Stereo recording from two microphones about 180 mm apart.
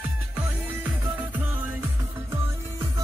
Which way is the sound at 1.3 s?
10° right (ahead or behind).